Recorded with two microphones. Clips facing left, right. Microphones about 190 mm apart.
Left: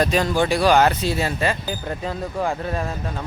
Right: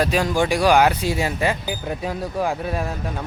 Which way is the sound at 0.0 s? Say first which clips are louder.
Even; 10° right (ahead or behind).